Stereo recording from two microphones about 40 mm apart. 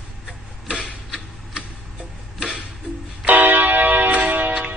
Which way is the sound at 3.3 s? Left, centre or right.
Right.